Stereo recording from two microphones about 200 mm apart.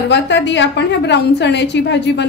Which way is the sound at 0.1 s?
60° left (ahead or behind).